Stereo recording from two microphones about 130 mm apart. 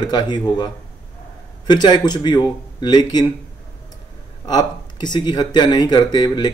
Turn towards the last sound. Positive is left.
turn(degrees=35)  # may be behind; listen again after turning